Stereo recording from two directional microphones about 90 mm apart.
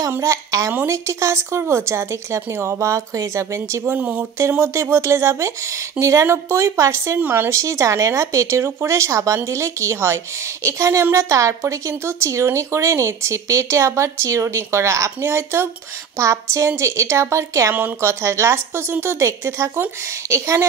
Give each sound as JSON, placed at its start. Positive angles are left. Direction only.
{"t": 0.1, "sound": "a woman's voice", "side_deg": -35}
{"t": 17.7, "sound": "a woman's voice", "side_deg": -20}
{"t": 18.2, "sound": "speech", "side_deg": -30}